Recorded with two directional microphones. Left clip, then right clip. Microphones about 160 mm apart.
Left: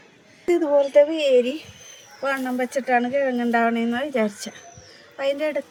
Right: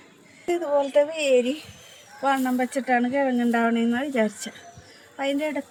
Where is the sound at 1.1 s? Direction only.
25° left (ahead or behind).